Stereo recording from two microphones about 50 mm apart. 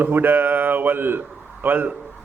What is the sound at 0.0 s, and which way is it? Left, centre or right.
A man's voice, right.